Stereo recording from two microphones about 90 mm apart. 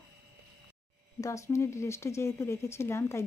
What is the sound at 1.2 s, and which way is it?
Speech, 35° left (ahead or behind).